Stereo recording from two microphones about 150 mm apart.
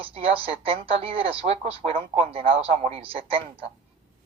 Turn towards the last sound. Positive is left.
turn(degrees=-40)  # may be behind; listen again after turning